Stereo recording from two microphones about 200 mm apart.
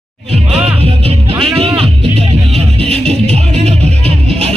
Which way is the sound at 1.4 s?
30° right (ahead or behind).